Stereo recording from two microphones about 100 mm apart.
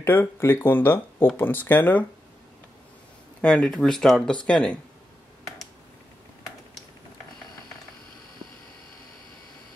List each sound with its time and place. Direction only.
0.0 s speech: 25° left (ahead or behind)
3.3 s speech: 10° left (ahead or behind)